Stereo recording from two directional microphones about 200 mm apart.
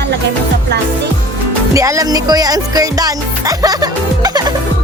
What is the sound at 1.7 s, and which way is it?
Music, 15° right (ahead or behind).